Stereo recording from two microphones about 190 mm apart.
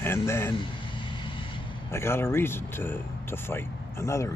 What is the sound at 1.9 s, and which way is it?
Speech, 15° left (ahead or behind).